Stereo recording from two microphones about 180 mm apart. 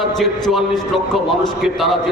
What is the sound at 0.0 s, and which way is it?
A man's voice, centre (ahead or behind).